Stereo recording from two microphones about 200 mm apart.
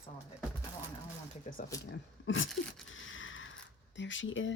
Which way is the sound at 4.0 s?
70° left (ahead or behind).